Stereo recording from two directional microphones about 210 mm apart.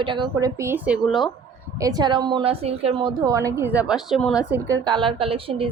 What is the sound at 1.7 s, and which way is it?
A woman's voice, 15° right (ahead or behind).